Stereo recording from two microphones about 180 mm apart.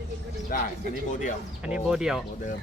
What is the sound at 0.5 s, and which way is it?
Speech, 50° left (ahead or behind).